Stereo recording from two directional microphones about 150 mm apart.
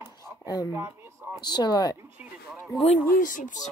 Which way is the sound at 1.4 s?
25° left (ahead or behind).